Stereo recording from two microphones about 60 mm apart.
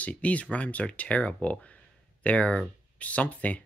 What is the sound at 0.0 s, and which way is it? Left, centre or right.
Speech, left.